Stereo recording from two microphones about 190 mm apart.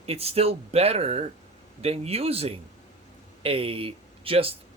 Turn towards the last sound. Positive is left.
turn(degrees=-30)  # may be behind; listen again after turning